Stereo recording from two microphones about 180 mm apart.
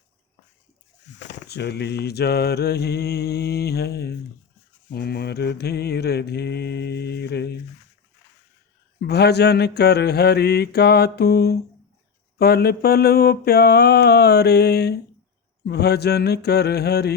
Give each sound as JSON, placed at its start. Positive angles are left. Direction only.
{"t": 1.5, "sound": "mantra", "side_deg": 65}
{"t": 9.0, "sound": "mantra", "side_deg": 65}